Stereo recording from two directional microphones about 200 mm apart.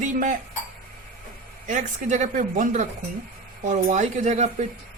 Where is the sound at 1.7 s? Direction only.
40° right (ahead or behind).